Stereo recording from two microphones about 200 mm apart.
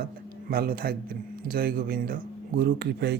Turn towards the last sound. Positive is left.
turn(degrees=-55)  # may be behind; listen again after turning